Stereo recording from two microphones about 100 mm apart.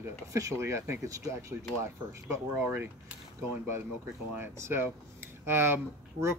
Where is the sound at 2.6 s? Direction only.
20° right (ahead or behind).